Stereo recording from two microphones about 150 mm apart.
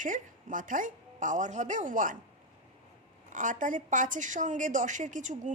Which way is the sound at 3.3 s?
60° right (ahead or behind).